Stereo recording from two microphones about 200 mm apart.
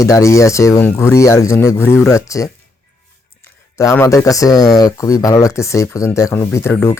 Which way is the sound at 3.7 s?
15° left (ahead or behind).